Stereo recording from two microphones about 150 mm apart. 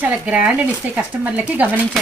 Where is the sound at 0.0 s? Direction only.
10° right (ahead or behind).